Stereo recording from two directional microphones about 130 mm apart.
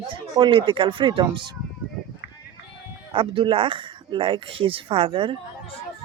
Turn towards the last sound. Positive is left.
turn(degrees=-45)  # may be behind; listen again after turning